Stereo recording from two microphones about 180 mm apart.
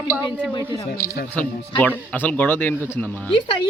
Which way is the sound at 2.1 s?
10° left (ahead or behind).